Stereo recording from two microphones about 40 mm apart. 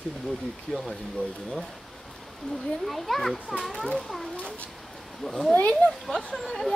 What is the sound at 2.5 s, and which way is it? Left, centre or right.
A child's voice, centre.